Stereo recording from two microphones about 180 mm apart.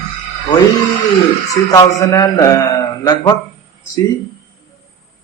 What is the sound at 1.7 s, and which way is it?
Speech, 20° left (ahead or behind).